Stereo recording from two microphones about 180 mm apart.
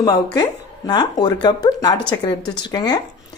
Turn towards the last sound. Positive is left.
turn(degrees=20)  # may be behind; listen again after turning